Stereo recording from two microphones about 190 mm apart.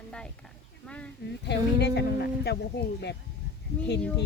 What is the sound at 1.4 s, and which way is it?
Speech, 60° left (ahead or behind).